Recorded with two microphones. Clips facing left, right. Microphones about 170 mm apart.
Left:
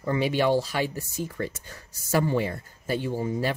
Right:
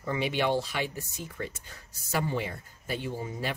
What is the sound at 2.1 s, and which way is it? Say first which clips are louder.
Speech: left 6 dB; 45° left (ahead or behind).